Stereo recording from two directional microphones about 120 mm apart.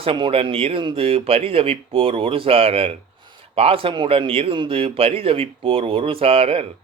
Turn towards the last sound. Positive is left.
turn(degrees=-55)  # may be behind; listen again after turning